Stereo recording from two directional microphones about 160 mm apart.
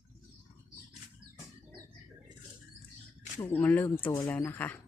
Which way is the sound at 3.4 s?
10° left (ahead or behind).